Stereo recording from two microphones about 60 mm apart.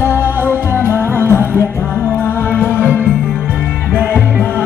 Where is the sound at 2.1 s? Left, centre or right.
Left.